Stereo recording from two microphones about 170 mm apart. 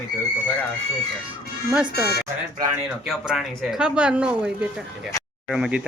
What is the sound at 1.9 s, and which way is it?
Speech, 70° left (ahead or behind).